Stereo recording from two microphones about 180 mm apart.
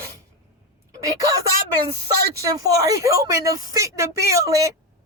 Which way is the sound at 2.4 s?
20° right (ahead or behind).